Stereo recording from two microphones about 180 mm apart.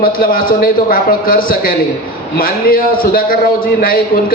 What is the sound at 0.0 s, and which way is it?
A man's voice, 55° left (ahead or behind).